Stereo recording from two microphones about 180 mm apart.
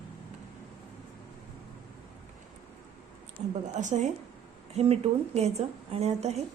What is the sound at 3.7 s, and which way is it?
A woman's voice, 40° right (ahead or behind).